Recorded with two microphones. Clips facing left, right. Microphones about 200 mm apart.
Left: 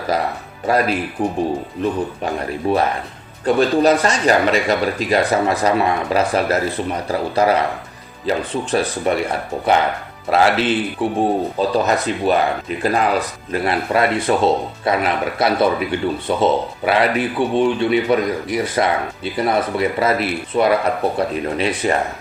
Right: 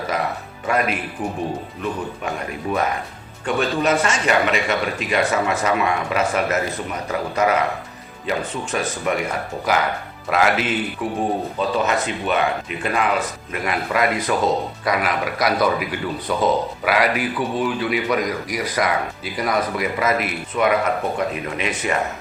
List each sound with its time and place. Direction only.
0.1 s speech: 35° left (ahead or behind)
10.2 s speech: 30° left (ahead or behind)